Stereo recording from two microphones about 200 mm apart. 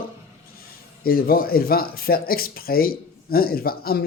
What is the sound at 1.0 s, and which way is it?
Speech, 50° left (ahead or behind).